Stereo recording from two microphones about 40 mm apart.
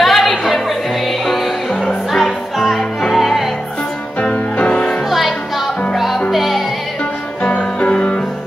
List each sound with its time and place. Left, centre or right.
0.0 s music: centre
4.3 s music: left
5.9 s music: centre
7.8 s music: left